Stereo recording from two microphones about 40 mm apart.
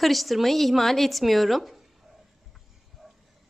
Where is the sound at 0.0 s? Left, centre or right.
Centre.